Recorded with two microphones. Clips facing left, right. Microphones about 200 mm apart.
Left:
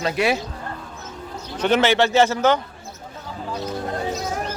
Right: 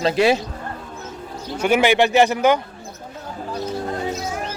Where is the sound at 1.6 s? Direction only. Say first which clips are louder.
Right 1 dB; 10° right (ahead or behind).